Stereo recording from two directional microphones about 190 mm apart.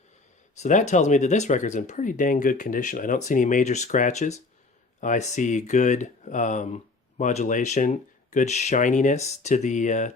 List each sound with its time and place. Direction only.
0.5 s speech: 40° left (ahead or behind)